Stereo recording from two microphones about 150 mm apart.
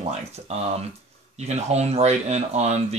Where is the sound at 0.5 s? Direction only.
45° right (ahead or behind).